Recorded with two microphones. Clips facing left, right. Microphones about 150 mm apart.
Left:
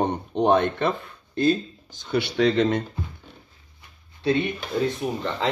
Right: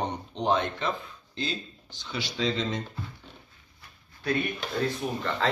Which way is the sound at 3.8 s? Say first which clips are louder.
Left 8 dB; 25° left (ahead or behind).